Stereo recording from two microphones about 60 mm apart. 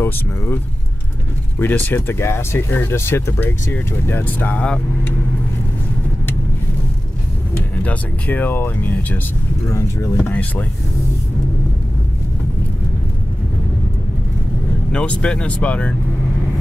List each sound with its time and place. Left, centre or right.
1.6 s speech: left
3.7 s speech: left
7.7 s speech: left
9.7 s speech: left
10.1 s speech: left
14.9 s speech: centre